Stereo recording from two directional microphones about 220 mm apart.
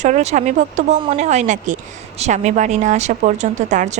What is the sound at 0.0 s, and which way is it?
Speech, 30° right (ahead or behind).